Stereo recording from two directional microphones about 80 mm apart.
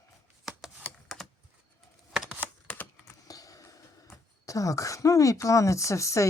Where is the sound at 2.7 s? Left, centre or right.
Left.